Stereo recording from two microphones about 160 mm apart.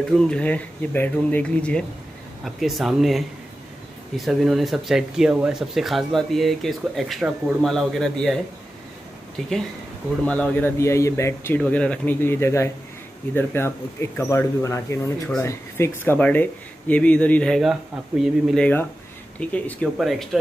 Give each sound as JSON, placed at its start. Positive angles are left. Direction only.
{"t": 0.1, "sound": "speech", "side_deg": 5}
{"t": 9.4, "sound": "speech", "side_deg": 0}